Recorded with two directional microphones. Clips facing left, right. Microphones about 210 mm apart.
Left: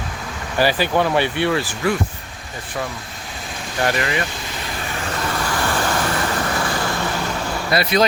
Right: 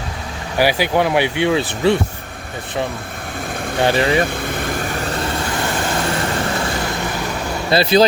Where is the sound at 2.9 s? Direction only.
55° right (ahead or behind).